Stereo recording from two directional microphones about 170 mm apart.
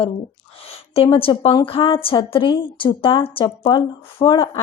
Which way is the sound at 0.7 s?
35° left (ahead or behind).